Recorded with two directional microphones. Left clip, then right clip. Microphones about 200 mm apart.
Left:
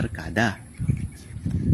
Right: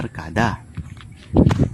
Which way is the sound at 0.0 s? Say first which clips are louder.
Right 3 dB; 15° right (ahead or behind).